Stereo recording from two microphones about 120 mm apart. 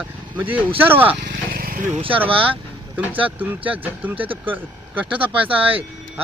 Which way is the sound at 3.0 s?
10° right (ahead or behind).